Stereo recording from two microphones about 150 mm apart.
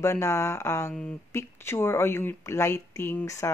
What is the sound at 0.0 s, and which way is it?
A woman's voice, 20° left (ahead or behind).